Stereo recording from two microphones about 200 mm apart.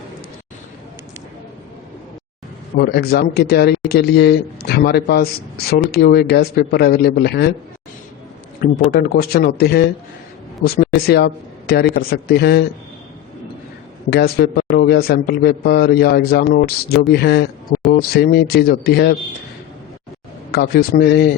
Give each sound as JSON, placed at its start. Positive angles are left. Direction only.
{"t": 2.7, "sound": "a man's voice", "side_deg": 50}
{"t": 8.6, "sound": "a man's voice", "side_deg": 50}
{"t": 14.1, "sound": "a man's voice", "side_deg": 55}
{"t": 20.5, "sound": "a man's voice", "side_deg": 55}